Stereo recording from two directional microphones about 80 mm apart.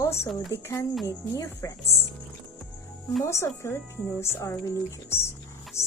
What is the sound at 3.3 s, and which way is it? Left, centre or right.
A woman's voice, left.